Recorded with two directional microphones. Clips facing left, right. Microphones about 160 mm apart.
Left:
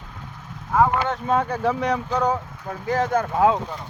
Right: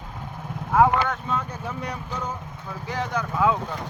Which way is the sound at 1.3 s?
70° left (ahead or behind).